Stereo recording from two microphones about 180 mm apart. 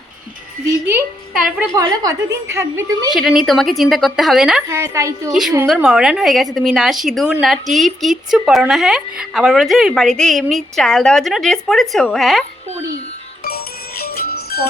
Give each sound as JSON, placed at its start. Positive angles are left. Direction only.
{"t": 1.3, "sound": "a woman's voice", "side_deg": -5}
{"t": 1.7, "sound": "a woman's voice", "side_deg": -20}
{"t": 3.2, "sound": "a woman's voice", "side_deg": 0}
{"t": 4.7, "sound": "a woman's voice", "side_deg": -15}
{"t": 5.3, "sound": "a woman's voice", "side_deg": 0}
{"t": 13.4, "sound": "music", "side_deg": 60}